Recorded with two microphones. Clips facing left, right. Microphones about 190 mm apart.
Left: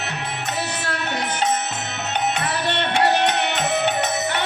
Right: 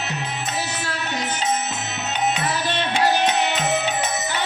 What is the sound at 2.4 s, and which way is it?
Music, 60° left (ahead or behind).